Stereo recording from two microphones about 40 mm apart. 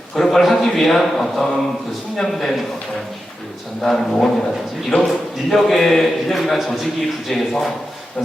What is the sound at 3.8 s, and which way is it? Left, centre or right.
Speech, centre.